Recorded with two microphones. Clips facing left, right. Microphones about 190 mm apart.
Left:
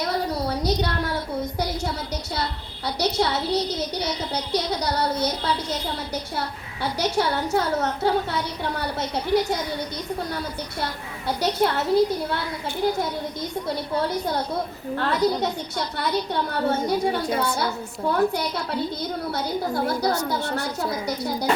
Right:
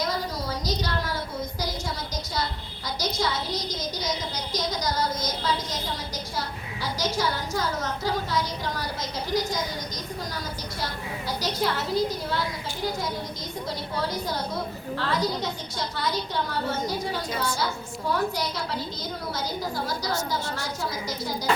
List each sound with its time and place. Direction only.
0.0 s a sound: 65° left (ahead or behind)
2.4 s a child's voice: 70° left (ahead or behind)
6.9 s a woman's voice: 65° left (ahead or behind)
11.3 s a woman's voice: 60° left (ahead or behind)
14.9 s a woman's voice: 65° left (ahead or behind)